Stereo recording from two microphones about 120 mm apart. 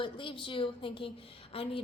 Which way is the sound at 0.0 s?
45° left (ahead or behind).